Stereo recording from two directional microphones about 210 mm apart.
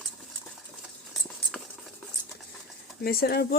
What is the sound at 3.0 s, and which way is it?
Speech, 45° left (ahead or behind).